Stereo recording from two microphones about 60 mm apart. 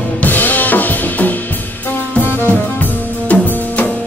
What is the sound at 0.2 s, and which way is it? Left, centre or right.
Drum kit, left.